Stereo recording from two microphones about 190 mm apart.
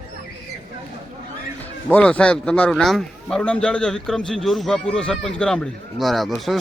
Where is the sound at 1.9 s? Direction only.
5° left (ahead or behind).